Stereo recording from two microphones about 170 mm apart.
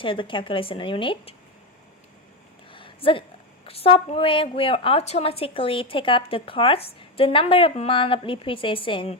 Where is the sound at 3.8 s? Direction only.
35° left (ahead or behind).